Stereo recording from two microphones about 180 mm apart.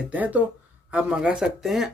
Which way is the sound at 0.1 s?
10° right (ahead or behind).